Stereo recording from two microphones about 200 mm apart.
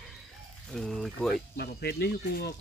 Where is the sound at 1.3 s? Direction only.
55° left (ahead or behind).